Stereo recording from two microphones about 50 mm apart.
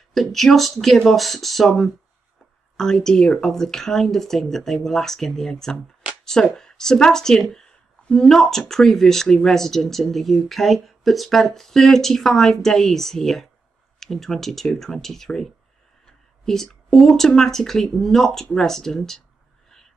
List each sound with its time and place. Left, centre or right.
0.1 s speech: centre